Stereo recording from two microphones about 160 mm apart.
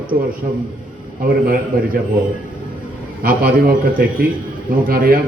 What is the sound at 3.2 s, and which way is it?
Speech, 65° right (ahead or behind).